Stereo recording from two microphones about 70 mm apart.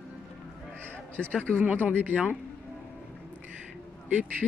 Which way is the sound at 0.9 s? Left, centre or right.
Centre.